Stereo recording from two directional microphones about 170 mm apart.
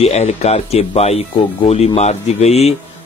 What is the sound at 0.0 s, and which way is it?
Speech, 40° left (ahead or behind).